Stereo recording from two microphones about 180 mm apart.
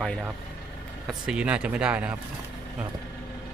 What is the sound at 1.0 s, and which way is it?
Speech, 5° right (ahead or behind).